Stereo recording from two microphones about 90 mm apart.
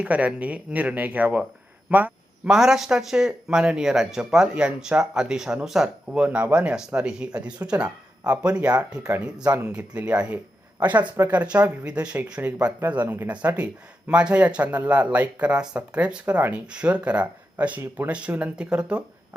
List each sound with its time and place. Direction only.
0.0 s speech: 15° right (ahead or behind)
1.9 s a sound: 20° right (ahead or behind)
2.5 s speech: 5° right (ahead or behind)